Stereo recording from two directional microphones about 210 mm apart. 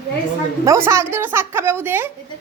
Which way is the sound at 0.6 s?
15° right (ahead or behind).